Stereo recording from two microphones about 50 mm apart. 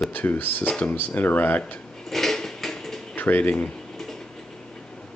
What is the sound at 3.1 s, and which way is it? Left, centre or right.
Speech, left.